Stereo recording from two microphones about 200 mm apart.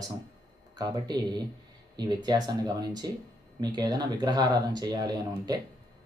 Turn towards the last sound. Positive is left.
turn(degrees=-20)  # may be behind; listen again after turning